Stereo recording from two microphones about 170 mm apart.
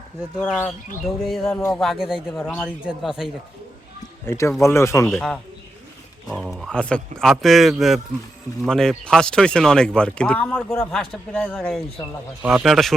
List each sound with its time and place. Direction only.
0.3 s speech: centre (ahead or behind)
2.4 s speech: 10° left (ahead or behind)
2.6 s speech: 5° right (ahead or behind)
4.3 s speech: 15° left (ahead or behind)
6.2 s speech: centre (ahead or behind)
12.4 s speech: 5° right (ahead or behind)